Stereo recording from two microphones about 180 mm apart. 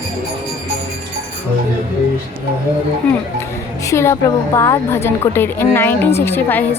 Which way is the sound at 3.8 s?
15° left (ahead or behind).